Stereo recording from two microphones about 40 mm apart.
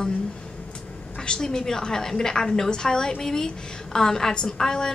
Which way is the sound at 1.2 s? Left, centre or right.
Centre.